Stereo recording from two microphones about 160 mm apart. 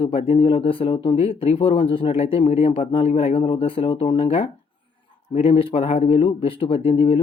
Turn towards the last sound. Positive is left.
turn(degrees=40)  # may be behind; listen again after turning